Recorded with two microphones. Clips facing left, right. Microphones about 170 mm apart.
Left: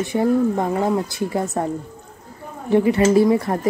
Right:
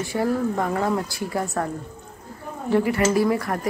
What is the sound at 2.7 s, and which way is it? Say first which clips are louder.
Speech: left 5 dB; 20° left (ahead or behind).